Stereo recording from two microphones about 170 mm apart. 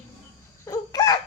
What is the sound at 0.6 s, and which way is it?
Chicken, 20° left (ahead or behind).